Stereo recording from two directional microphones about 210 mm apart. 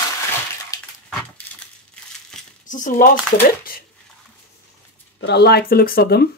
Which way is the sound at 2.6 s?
35° left (ahead or behind).